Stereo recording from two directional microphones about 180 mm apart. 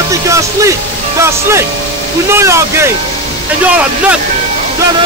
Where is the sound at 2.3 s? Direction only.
15° right (ahead or behind).